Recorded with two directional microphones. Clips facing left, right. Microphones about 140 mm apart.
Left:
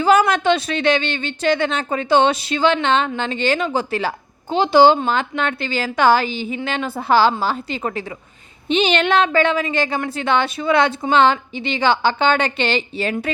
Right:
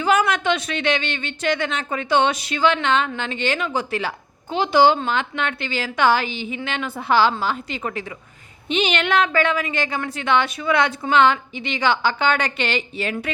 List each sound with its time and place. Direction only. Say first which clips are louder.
0.0 s speech: left 4 dB; 35° left (ahead or behind)